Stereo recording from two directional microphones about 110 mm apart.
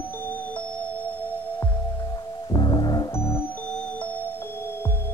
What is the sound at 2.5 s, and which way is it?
Music, 45° left (ahead or behind).